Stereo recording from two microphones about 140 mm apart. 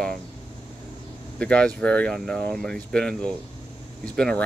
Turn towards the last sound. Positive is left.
turn(degrees=5)  # may be behind; listen again after turning